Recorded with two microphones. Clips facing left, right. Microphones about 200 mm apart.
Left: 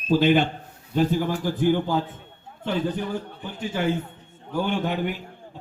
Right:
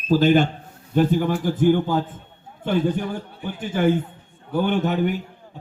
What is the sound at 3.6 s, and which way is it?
A man's voice, 50° right (ahead or behind).